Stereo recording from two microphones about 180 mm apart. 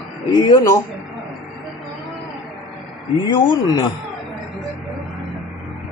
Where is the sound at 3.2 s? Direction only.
25° left (ahead or behind).